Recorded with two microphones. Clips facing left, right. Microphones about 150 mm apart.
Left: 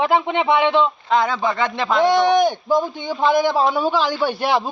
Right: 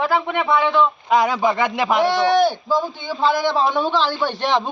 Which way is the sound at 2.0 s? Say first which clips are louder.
Left 2 dB; 15° left (ahead or behind).